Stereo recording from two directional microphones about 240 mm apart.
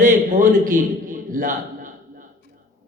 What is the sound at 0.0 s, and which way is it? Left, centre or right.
A man's voice, right.